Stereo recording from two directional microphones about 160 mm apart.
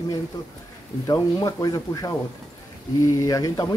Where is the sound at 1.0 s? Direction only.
25° left (ahead or behind).